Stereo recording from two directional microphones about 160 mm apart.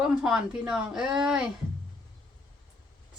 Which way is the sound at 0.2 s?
5° right (ahead or behind).